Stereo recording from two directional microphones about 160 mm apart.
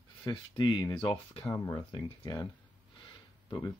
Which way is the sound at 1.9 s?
35° left (ahead or behind).